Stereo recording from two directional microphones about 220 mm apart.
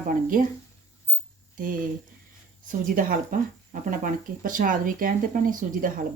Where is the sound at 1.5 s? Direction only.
40° right (ahead or behind).